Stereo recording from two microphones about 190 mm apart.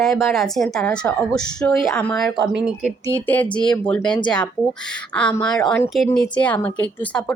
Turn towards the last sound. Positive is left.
turn(degrees=5)  # may be behind; listen again after turning